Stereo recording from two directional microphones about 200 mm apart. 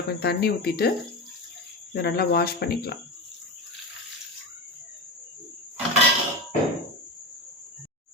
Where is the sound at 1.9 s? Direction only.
50° left (ahead or behind).